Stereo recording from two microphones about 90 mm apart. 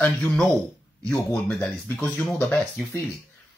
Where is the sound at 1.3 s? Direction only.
15° left (ahead or behind).